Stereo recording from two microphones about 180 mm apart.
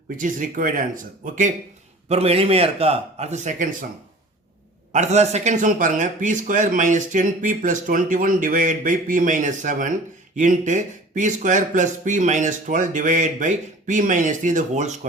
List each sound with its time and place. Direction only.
0.2 s a man's voice: 45° right (ahead or behind)
2.0 s a man's voice: 35° right (ahead or behind)
4.9 s a man's voice: 40° right (ahead or behind)